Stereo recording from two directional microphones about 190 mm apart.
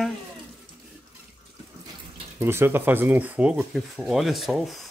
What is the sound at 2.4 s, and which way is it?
Speech, 10° right (ahead or behind).